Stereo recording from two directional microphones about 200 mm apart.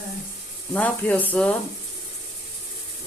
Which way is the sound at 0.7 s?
5° left (ahead or behind).